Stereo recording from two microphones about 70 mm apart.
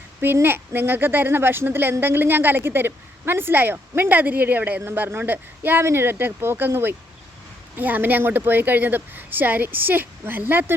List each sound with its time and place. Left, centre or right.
0.4 s a woman's voice: right